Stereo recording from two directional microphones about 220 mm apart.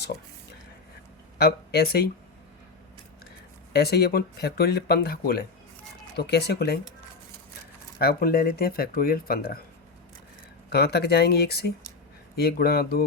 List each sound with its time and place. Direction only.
1.4 s speech: 45° left (ahead or behind)
3.7 s speech: 45° left (ahead or behind)
7.9 s speech: 45° left (ahead or behind)
10.7 s speech: 45° left (ahead or behind)